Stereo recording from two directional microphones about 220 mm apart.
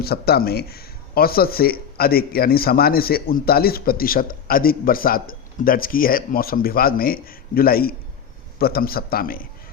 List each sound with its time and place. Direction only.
0.0 s speech: 45° left (ahead or behind)